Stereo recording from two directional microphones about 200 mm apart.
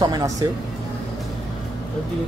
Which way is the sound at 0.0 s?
15° right (ahead or behind).